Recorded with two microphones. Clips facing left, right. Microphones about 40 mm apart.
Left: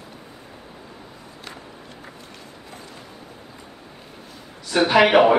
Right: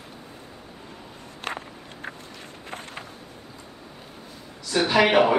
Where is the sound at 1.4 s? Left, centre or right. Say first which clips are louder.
Right 8 dB; right.